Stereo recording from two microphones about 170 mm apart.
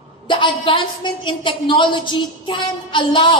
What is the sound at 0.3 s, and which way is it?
A woman's voice, 30° left (ahead or behind).